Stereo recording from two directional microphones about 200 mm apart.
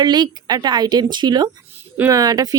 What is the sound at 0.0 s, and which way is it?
Speech, 20° right (ahead or behind).